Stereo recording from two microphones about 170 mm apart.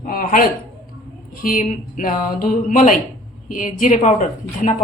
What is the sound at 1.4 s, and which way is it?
Speech, 50° left (ahead or behind).